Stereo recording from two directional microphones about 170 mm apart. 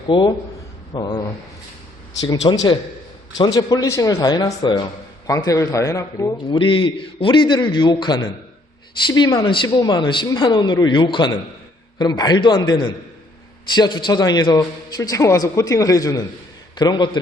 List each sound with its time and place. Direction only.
0.1 s a man's voice: 25° left (ahead or behind)
2.5 s a man's voice: 25° left (ahead or behind)